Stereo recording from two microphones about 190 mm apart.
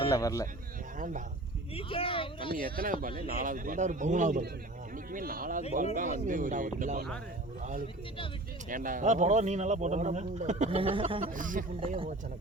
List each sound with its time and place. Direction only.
0.1 s speech: 15° left (ahead or behind)
0.9 s speech: 45° right (ahead or behind)
1.7 s speech: 30° left (ahead or behind)
2.5 s speech: 50° right (ahead or behind)
8.7 s speech: 45° right (ahead or behind); by 11.3 s 30° right (ahead or behind)
11.3 s speech: 45° right (ahead or behind)
11.8 s speech: 30° right (ahead or behind)